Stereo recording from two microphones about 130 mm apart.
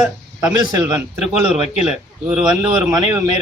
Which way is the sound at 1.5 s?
5° right (ahead or behind).